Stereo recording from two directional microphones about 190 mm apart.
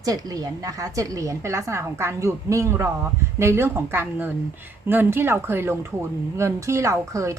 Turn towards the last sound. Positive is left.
turn(degrees=-15)  # may be behind; listen again after turning